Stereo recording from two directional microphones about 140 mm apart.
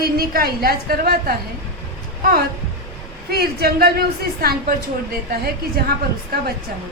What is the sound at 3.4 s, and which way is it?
Speech, 90° right.